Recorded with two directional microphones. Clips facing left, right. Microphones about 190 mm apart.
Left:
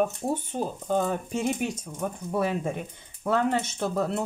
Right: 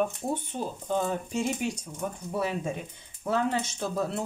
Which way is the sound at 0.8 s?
55° left (ahead or behind).